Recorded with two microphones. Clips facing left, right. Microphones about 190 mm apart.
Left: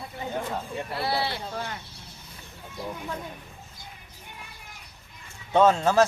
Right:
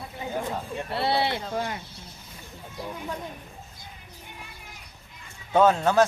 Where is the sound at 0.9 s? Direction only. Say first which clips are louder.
Right 4 dB; 25° right (ahead or behind).